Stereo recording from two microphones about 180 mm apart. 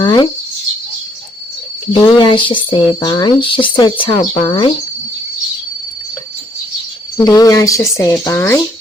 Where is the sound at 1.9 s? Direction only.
25° left (ahead or behind).